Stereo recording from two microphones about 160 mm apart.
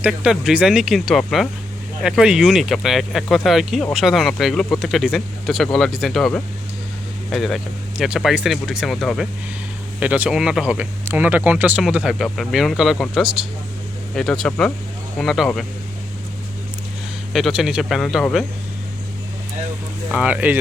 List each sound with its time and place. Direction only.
0.0 s speech: 5° right (ahead or behind)
17.3 s speech: centre (ahead or behind)
20.1 s speech: 5° right (ahead or behind)